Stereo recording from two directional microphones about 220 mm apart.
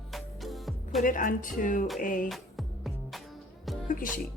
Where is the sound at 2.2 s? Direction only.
Centre (ahead or behind).